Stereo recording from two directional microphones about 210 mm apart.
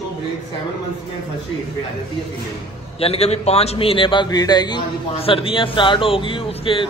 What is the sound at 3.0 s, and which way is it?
A man's voice, 30° left (ahead or behind).